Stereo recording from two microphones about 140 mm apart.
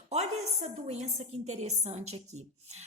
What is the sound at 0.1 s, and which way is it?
A woman's voice, 50° right (ahead or behind).